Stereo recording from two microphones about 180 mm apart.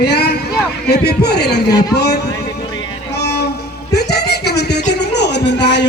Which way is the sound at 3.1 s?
65° left (ahead or behind).